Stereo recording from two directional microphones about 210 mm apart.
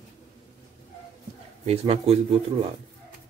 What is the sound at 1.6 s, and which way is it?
Speech, 30° right (ahead or behind).